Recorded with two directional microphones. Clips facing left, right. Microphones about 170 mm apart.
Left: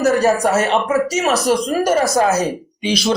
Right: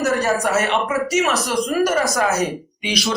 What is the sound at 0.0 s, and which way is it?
Speech, 35° left (ahead or behind).